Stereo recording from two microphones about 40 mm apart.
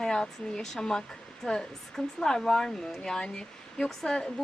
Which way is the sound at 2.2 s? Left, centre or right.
Centre.